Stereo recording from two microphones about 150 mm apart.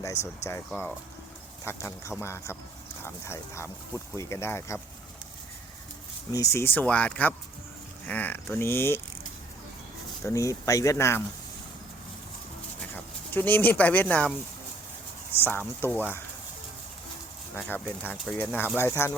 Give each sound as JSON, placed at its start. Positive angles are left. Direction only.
{"t": 0.0, "sound": "speech", "side_deg": 20}
{"t": 0.7, "sound": "speech", "side_deg": 10}
{"t": 6.3, "sound": "speech", "side_deg": 20}
{"t": 10.2, "sound": "speech", "side_deg": 20}
{"t": 13.3, "sound": "speech", "side_deg": 10}
{"t": 15.8, "sound": "speech", "side_deg": 15}
{"t": 17.6, "sound": "speech", "side_deg": 5}